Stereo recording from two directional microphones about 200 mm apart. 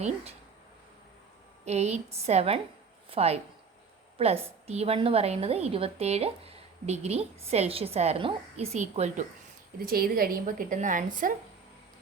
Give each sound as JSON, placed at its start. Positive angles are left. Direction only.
{"t": 1.6, "sound": "a woman's voice", "side_deg": -35}
{"t": 9.8, "sound": "a woman's voice", "side_deg": -45}